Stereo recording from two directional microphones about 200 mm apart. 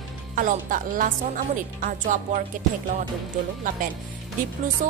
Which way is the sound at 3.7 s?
40° right (ahead or behind).